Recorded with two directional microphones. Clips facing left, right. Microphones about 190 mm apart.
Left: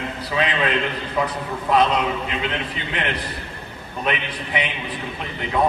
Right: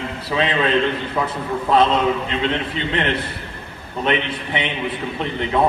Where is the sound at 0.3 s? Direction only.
30° right (ahead or behind).